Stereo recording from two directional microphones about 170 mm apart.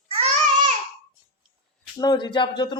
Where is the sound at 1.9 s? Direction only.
25° left (ahead or behind).